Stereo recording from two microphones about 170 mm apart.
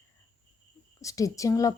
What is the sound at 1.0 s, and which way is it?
Speech, 20° left (ahead or behind).